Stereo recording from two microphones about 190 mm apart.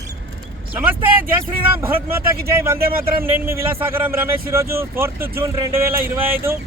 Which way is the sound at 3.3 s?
15° right (ahead or behind).